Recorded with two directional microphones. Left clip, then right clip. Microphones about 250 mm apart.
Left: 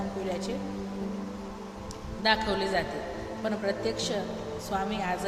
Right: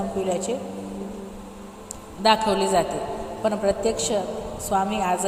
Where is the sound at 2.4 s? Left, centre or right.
Centre.